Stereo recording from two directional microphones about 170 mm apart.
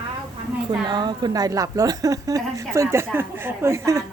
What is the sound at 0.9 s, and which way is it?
A woman's voice, 25° right (ahead or behind).